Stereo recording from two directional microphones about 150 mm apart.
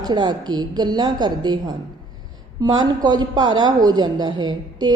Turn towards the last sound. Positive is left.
turn(degrees=-30)  # may be behind; listen again after turning